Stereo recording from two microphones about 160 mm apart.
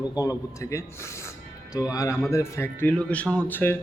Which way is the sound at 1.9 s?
20° left (ahead or behind).